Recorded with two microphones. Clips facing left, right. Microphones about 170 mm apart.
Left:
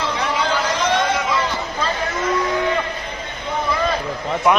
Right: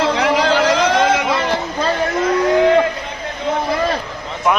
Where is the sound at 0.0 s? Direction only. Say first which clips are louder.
Right 6 dB; 80° right; by 1.5 s 60° right (ahead or behind).